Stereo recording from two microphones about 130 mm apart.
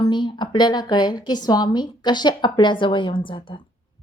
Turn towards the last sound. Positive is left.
turn(degrees=40)  # may be behind; listen again after turning